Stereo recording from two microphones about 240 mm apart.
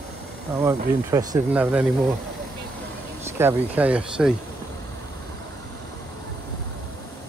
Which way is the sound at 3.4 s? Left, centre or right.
Centre.